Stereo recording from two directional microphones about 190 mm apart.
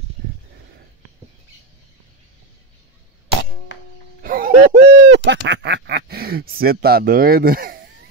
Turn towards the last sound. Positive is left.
turn(degrees=-50)  # may be behind; listen again after turning